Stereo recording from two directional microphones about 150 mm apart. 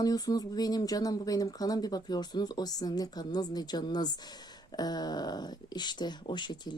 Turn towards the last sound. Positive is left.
turn(degrees=30)  # may be behind; listen again after turning